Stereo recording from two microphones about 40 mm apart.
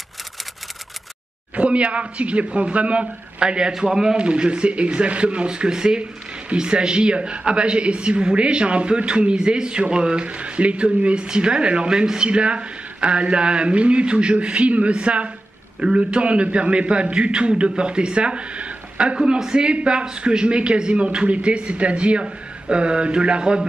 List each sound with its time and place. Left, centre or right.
1.5 s a man's voice: right